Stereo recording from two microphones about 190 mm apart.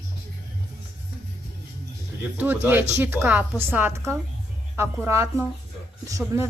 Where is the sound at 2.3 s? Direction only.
10° right (ahead or behind).